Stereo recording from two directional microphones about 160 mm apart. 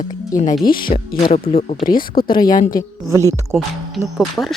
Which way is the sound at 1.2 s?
40° left (ahead or behind).